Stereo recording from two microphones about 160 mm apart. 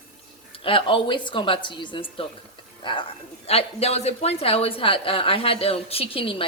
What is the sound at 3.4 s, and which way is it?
Speech, 40° left (ahead or behind).